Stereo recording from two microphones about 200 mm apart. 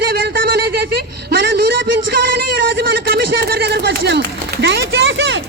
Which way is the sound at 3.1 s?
50° right (ahead or behind).